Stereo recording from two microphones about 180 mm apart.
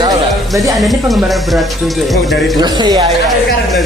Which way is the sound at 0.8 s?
Centre (ahead or behind).